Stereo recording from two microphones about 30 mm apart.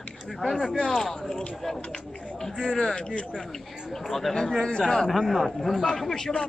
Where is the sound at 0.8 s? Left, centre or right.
Centre.